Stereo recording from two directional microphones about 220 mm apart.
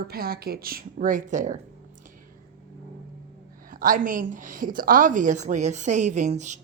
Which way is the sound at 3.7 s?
40° right (ahead or behind).